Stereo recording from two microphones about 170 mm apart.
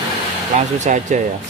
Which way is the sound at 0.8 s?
45° right (ahead or behind).